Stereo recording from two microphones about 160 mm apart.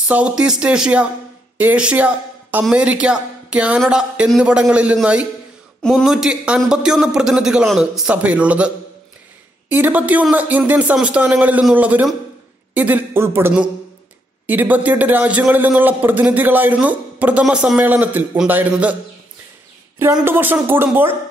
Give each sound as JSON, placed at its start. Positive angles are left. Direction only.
{"t": 0.1, "sound": "a man's voice", "side_deg": -5}
{"t": 5.8, "sound": "a man's voice", "side_deg": 5}
{"t": 20.2, "sound": "a man's voice", "side_deg": -10}